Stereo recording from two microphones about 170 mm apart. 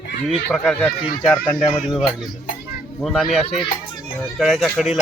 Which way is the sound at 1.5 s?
30° left (ahead or behind).